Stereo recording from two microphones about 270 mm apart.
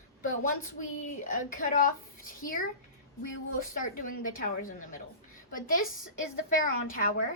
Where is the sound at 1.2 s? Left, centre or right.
Left.